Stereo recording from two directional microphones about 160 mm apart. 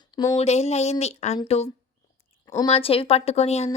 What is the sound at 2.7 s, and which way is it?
Speech, 35° left (ahead or behind).